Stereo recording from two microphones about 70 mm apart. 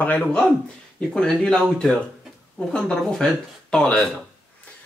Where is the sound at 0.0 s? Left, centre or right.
Left.